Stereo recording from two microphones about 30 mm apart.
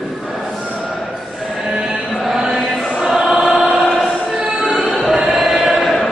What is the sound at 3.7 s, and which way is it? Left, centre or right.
Music, centre.